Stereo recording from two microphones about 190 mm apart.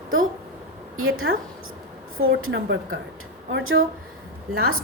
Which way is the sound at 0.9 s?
90° right.